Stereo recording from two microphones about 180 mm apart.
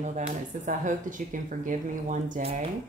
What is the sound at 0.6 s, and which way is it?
Speech, 45° right (ahead or behind).